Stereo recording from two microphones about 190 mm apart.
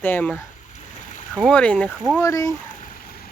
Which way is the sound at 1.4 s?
5° left (ahead or behind).